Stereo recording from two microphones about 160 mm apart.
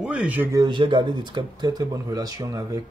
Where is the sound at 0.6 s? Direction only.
30° right (ahead or behind).